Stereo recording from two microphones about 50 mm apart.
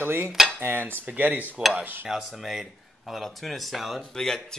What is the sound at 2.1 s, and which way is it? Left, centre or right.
A man's voice, centre.